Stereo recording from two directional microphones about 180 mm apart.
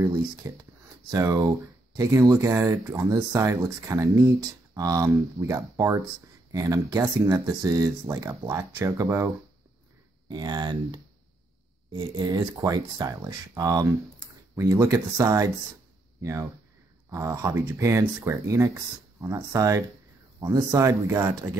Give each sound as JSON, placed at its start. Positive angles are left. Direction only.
{"t": 0.0, "sound": "speech", "side_deg": -20}